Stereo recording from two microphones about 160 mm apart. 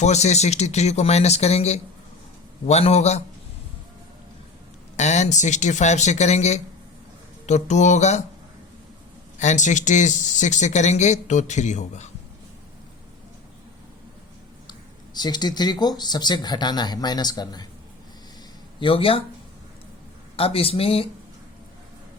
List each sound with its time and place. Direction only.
0.0 s speech: 45° left (ahead or behind)
4.9 s speech: 45° left (ahead or behind)
9.4 s speech: 50° left (ahead or behind)
14.7 s speech: 25° left (ahead or behind)
18.8 s speech: 35° left (ahead or behind)
20.3 s speech: 35° left (ahead or behind)